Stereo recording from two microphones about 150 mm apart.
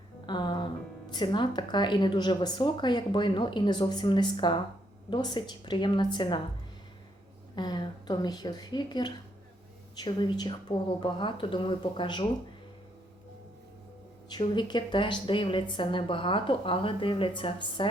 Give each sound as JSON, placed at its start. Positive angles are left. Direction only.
{"t": 0.3, "sound": "music", "side_deg": 30}
{"t": 1.1, "sound": "a woman's voice", "side_deg": 30}
{"t": 7.5, "sound": "a woman's voice", "side_deg": 30}
{"t": 14.3, "sound": "a woman's voice", "side_deg": 30}